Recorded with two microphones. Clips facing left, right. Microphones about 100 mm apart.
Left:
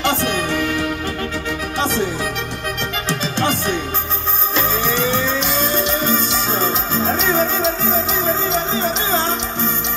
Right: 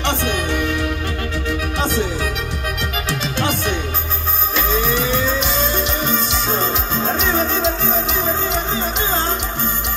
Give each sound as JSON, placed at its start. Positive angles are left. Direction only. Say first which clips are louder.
{"t": 3.2, "sound": "music", "louder": "left 2 dB", "side_deg": 35}
{"t": 6.0, "sound": "music", "louder": "left 1 dB", "side_deg": -5}